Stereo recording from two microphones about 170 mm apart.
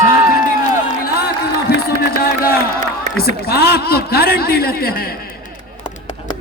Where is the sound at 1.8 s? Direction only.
60° left (ahead or behind).